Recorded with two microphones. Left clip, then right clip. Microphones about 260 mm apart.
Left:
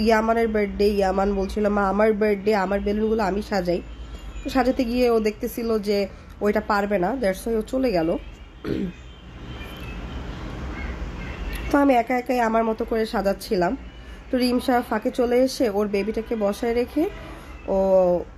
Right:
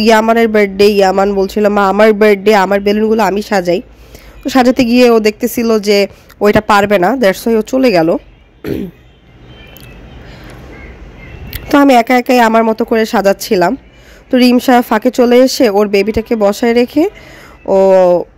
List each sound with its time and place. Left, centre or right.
0.0 s speech: right
11.7 s speech: right